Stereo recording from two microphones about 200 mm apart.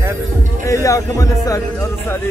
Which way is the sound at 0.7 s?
15° left (ahead or behind).